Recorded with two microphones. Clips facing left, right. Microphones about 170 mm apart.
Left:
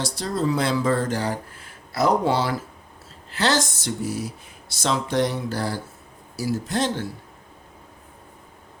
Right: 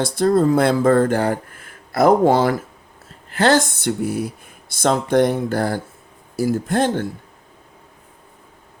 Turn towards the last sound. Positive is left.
turn(degrees=-50)  # may be behind; listen again after turning